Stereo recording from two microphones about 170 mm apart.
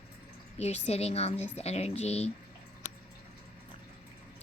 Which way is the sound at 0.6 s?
40° left (ahead or behind).